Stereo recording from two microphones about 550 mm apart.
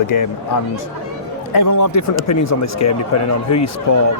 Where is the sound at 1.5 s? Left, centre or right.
Left.